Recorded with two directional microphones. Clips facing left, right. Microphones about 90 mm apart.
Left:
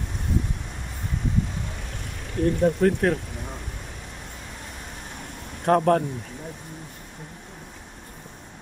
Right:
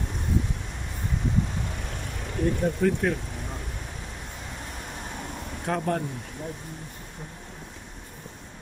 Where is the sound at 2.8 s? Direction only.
70° left (ahead or behind).